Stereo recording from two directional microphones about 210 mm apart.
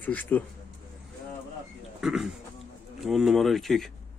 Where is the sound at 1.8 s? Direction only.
Centre (ahead or behind).